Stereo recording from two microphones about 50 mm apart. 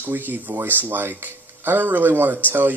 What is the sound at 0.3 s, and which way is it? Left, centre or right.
Speech, right.